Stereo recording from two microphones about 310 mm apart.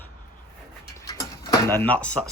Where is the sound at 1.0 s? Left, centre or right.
Centre.